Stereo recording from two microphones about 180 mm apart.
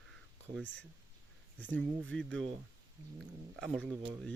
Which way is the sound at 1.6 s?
10° left (ahead or behind).